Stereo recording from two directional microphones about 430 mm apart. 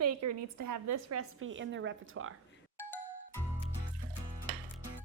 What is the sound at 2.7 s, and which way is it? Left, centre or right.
Music, centre.